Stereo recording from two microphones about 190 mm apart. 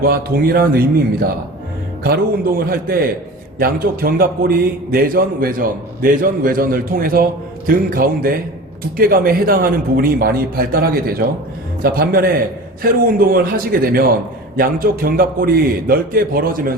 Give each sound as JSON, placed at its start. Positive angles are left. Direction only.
{"t": 0.0, "sound": "a man's voice", "side_deg": -50}
{"t": 2.0, "sound": "a man's voice", "side_deg": -50}